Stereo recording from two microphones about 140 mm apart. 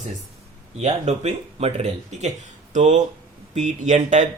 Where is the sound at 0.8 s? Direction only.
50° right (ahead or behind).